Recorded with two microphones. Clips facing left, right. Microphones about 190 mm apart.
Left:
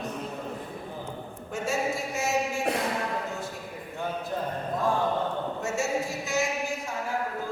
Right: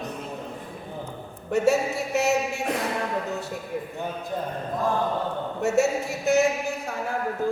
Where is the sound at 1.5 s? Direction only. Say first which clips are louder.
Right 7 dB; 70° right (ahead or behind).